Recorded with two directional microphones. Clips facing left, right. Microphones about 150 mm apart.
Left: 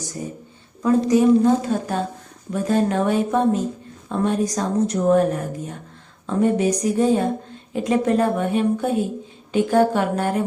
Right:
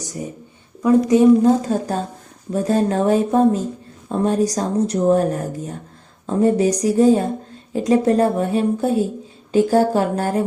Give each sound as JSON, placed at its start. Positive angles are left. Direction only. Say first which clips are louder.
{"t": 0.2, "sound": "a woman's voice", "louder": "right 1 dB", "side_deg": -15}
{"t": 1.5, "sound": "speech", "louder": "right 2 dB", "side_deg": -35}